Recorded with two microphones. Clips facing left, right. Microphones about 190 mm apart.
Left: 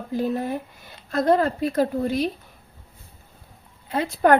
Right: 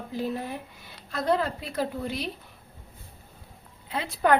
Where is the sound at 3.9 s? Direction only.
50° left (ahead or behind).